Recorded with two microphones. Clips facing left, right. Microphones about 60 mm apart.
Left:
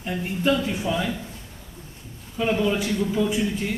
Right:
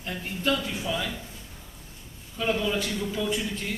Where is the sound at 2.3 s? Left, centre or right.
Centre.